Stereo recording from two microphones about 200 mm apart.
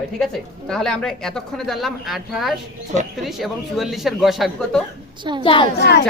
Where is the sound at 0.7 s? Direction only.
5° left (ahead or behind).